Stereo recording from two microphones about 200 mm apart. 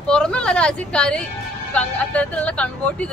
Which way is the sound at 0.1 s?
5° left (ahead or behind).